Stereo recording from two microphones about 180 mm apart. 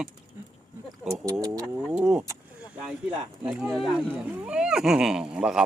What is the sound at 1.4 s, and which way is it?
Vehicle, 20° right (ahead or behind).